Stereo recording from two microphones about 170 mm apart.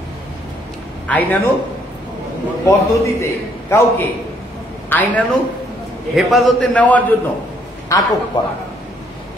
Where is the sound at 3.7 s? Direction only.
15° left (ahead or behind).